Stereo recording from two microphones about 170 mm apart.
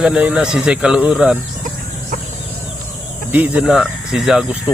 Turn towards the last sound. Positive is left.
turn(degrees=-5)  # may be behind; listen again after turning